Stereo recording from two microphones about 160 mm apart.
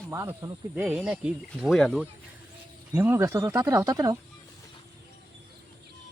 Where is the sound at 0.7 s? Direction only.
5° right (ahead or behind).